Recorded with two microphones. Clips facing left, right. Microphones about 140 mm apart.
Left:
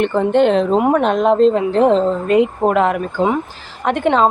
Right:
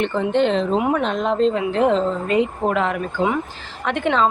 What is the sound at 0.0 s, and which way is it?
A woman's voice, 50° left (ahead or behind).